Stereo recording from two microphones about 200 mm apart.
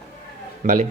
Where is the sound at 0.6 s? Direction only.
40° right (ahead or behind).